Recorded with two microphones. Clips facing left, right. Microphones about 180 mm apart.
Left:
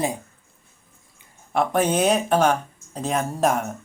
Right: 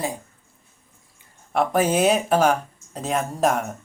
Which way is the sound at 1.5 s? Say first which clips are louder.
Right 1 dB; centre (ahead or behind).